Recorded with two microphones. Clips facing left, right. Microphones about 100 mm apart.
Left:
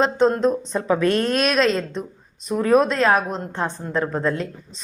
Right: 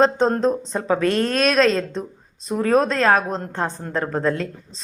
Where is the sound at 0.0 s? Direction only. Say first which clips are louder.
Right 1 dB; 35° right (ahead or behind).